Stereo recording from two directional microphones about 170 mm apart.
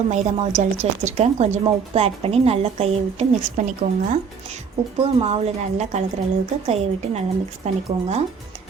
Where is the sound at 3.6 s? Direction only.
50° right (ahead or behind).